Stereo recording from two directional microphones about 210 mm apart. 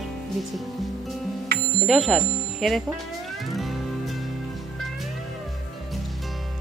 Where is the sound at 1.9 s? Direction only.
Centre (ahead or behind).